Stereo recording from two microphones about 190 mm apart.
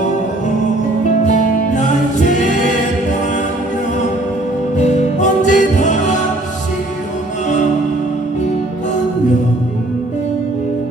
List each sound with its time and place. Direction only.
1.2 s music: 40° left (ahead or behind)
4.8 s music: 40° left (ahead or behind)